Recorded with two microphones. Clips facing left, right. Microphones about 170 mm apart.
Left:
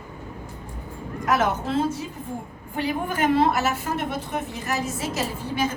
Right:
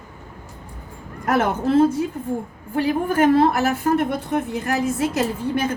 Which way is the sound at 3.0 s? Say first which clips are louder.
Right 4 dB; 50° right (ahead or behind).